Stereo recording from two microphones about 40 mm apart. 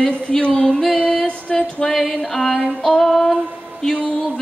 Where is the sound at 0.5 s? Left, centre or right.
Centre.